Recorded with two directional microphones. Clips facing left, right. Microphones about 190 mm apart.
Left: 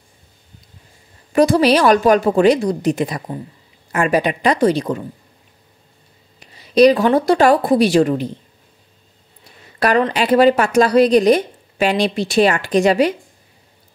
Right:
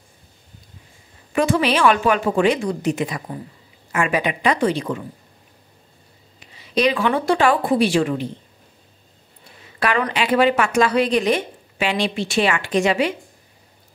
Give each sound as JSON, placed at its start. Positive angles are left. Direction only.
{"t": 1.3, "sound": "speech", "side_deg": 35}
{"t": 6.7, "sound": "speech", "side_deg": 35}
{"t": 9.8, "sound": "a woman's voice", "side_deg": 40}